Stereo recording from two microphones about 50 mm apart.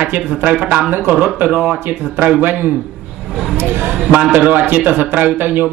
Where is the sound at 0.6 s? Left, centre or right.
Right.